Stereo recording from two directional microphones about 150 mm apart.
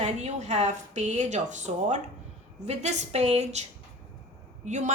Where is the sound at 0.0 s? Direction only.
50° right (ahead or behind).